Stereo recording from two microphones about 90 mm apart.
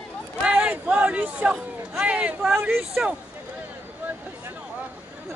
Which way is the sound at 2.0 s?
15° right (ahead or behind).